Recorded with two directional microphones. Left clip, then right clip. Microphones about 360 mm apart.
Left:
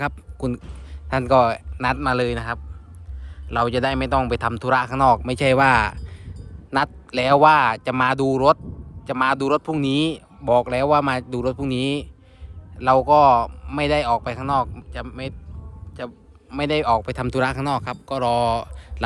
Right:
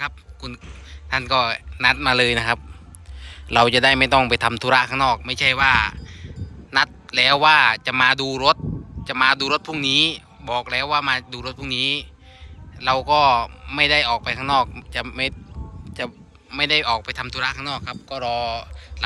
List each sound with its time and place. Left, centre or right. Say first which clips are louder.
0.0 s a man's voice: left 3 dB; centre